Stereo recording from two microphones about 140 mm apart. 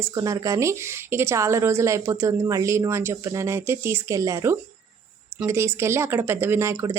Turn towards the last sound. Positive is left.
turn(degrees=-20)  # may be behind; listen again after turning